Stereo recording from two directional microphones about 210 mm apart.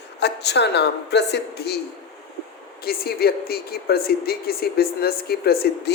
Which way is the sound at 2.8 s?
45° left (ahead or behind).